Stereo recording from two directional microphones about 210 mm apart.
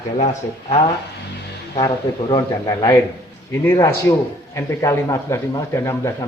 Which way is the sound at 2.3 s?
15° left (ahead or behind).